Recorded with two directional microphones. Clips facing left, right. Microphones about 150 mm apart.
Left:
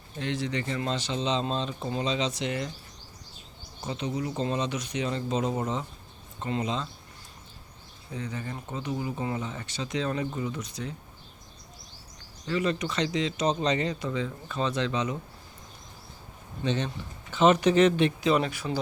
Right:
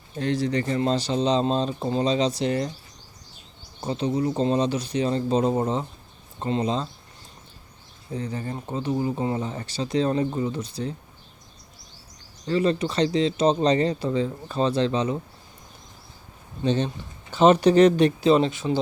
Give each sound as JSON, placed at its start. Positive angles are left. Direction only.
{"t": 0.2, "sound": "speech", "side_deg": -40}
{"t": 3.8, "sound": "speech", "side_deg": -35}
{"t": 8.1, "sound": "speech", "side_deg": -35}
{"t": 12.5, "sound": "speech", "side_deg": -35}
{"t": 16.6, "sound": "speech", "side_deg": -30}